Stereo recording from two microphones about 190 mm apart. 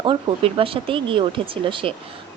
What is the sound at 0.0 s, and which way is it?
Speech, 25° right (ahead or behind).